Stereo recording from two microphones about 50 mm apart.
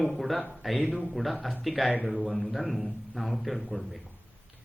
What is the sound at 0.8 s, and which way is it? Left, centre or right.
Speech, centre.